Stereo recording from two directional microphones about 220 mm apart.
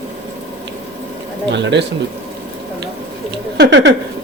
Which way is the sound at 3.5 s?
50° right (ahead or behind).